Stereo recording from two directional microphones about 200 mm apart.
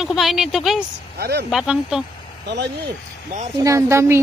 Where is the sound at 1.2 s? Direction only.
55° right (ahead or behind).